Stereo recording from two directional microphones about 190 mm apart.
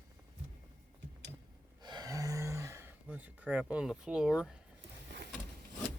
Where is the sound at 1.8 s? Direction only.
20° right (ahead or behind); by 4.6 s 5° right (ahead or behind).